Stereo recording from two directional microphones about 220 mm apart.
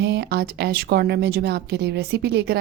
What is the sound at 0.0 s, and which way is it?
Speech, 50° right (ahead or behind).